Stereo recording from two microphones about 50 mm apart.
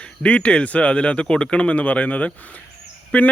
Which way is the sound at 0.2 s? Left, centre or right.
Left.